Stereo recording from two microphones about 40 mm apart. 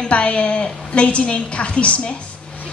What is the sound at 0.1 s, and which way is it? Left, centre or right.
A woman's voice, left.